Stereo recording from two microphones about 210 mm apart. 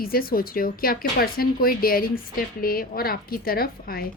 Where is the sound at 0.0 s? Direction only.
45° left (ahead or behind).